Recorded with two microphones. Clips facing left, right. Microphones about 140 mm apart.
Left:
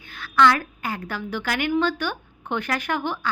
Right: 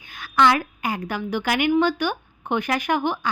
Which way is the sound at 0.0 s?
15° right (ahead or behind).